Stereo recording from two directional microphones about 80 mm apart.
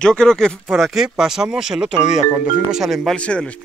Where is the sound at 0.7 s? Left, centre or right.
Centre.